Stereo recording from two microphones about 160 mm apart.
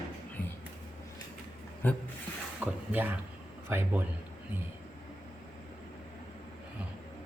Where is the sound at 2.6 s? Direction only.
10° right (ahead or behind).